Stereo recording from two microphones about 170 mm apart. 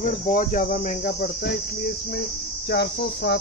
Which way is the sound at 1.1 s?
70° left (ahead or behind).